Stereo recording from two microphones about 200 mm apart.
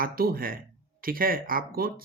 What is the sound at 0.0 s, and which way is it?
Speech, 45° right (ahead or behind).